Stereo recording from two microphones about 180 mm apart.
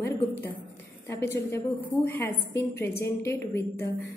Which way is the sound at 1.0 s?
15° left (ahead or behind).